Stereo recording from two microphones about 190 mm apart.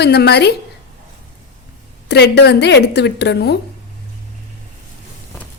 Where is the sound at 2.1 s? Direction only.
60° left (ahead or behind).